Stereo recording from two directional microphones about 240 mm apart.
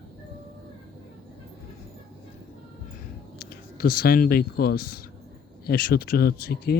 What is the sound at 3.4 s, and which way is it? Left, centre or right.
Speech, left.